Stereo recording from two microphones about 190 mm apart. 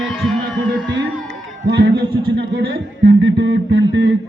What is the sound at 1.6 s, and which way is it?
Speech, 65° right (ahead or behind).